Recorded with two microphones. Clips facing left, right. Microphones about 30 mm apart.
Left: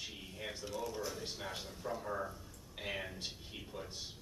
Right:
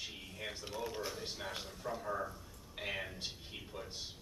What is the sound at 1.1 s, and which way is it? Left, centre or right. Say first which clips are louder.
A man's voice: even; centre.